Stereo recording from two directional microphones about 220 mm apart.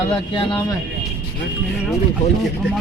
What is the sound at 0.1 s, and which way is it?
Speech, 20° left (ahead or behind).